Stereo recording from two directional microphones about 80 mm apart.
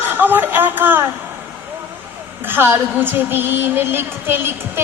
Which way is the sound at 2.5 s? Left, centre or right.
Right.